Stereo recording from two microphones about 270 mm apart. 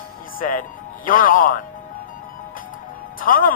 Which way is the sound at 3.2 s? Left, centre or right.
Left.